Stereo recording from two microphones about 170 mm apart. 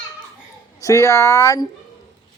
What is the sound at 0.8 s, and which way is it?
Speech, 20° left (ahead or behind).